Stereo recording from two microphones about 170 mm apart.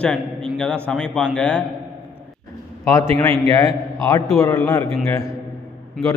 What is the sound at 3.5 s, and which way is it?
A man's voice, 20° left (ahead or behind).